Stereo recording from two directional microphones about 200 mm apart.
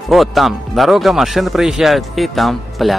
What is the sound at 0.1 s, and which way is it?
Speech, centre (ahead or behind).